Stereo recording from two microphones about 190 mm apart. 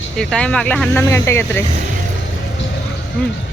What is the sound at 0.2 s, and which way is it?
Speech, 5° left (ahead or behind).